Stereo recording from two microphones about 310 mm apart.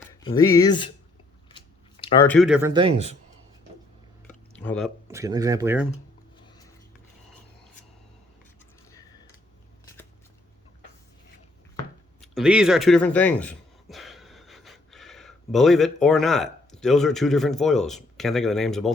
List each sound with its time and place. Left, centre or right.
0.1 s speech: centre
1.5 s biting: centre
2.3 s speech: centre
4.6 s speech: centre
5.0 s speech: centre
8.9 s a sound: centre
12.2 s speech: centre